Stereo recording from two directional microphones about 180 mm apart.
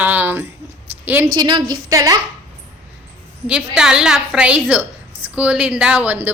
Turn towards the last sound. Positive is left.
turn(degrees=-10)  # may be behind; listen again after turning